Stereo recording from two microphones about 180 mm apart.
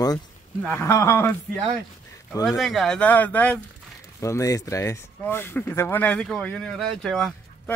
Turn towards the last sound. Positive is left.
turn(degrees=0)  # may be behind; listen again after turning